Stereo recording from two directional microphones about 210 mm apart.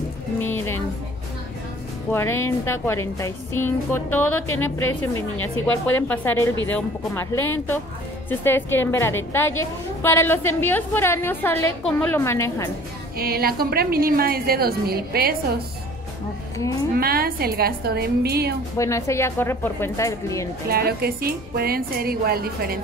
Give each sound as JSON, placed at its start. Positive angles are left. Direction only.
{"t": 0.4, "sound": "music", "side_deg": 10}
{"t": 2.1, "sound": "a woman's voice", "side_deg": 10}
{"t": 13.2, "sound": "a woman's voice", "side_deg": -45}
{"t": 16.9, "sound": "a woman's voice", "side_deg": -45}
{"t": 18.8, "sound": "a woman's voice", "side_deg": 15}
{"t": 20.6, "sound": "a woman's voice", "side_deg": -45}